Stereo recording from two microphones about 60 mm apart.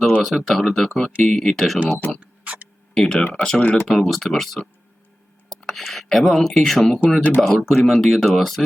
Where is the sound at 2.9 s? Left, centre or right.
Centre.